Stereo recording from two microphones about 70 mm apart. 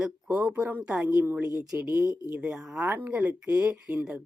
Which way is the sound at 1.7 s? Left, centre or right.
Right.